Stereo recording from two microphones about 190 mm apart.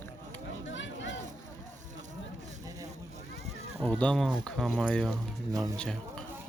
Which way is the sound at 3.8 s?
5° left (ahead or behind).